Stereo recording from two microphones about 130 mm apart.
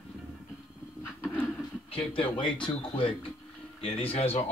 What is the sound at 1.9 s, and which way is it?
Speech, 45° left (ahead or behind).